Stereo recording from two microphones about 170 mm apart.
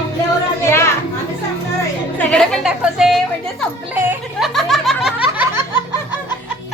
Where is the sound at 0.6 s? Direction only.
15° left (ahead or behind).